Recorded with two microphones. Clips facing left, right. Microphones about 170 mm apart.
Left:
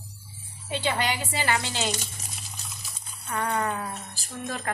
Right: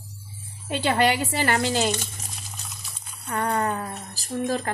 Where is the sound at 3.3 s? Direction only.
40° right (ahead or behind).